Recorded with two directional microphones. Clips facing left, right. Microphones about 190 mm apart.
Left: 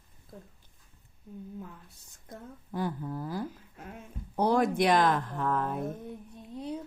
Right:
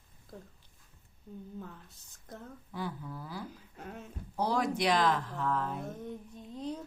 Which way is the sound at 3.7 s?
5° left (ahead or behind).